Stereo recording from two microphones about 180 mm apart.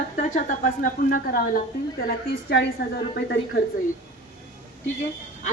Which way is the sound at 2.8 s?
70° left (ahead or behind).